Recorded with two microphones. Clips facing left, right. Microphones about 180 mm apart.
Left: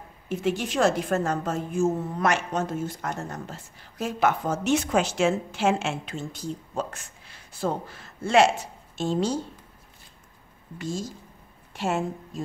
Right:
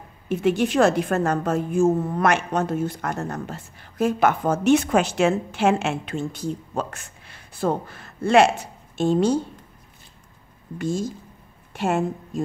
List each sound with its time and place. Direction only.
0.3 s a woman's voice: 60° right (ahead or behind)
10.8 s a woman's voice: 55° right (ahead or behind)